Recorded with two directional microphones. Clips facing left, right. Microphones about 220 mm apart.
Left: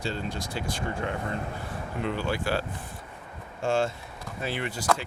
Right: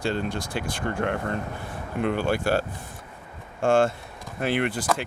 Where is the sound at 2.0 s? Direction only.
50° right (ahead or behind).